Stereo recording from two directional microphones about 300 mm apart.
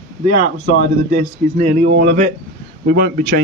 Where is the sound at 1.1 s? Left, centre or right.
Right.